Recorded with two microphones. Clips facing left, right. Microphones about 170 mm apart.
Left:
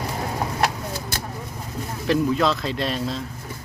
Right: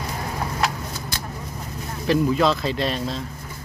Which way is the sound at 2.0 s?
Centre (ahead or behind).